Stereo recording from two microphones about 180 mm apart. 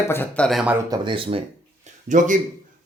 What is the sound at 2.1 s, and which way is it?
Speech, 45° right (ahead or behind).